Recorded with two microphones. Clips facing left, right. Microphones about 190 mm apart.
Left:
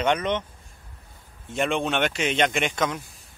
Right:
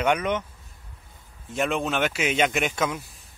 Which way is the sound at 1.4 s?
Centre (ahead or behind).